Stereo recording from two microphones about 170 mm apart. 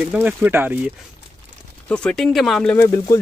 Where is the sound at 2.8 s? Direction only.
20° left (ahead or behind).